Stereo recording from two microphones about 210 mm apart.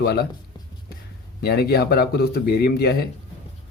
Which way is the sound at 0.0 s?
50° left (ahead or behind).